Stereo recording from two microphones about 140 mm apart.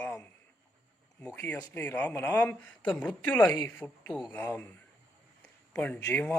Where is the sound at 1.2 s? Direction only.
10° left (ahead or behind).